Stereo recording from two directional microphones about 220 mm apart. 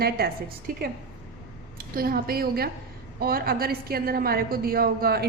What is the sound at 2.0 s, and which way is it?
Speech, 40° right (ahead or behind).